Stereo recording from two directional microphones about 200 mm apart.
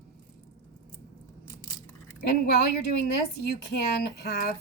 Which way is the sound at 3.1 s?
50° left (ahead or behind).